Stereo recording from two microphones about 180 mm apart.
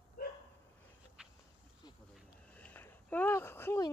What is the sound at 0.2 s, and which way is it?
Dog, 60° left (ahead or behind).